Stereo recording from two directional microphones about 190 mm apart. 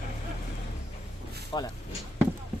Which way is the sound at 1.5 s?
25° left (ahead or behind).